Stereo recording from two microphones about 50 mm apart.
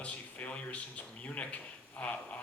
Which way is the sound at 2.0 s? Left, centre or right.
Left.